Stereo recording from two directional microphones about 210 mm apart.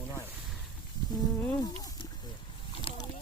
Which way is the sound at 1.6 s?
20° left (ahead or behind).